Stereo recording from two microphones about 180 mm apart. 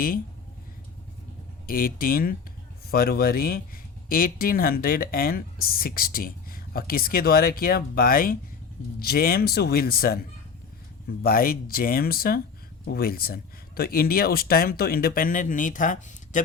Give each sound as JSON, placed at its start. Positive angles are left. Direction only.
{"t": 1.6, "sound": "speech", "side_deg": 55}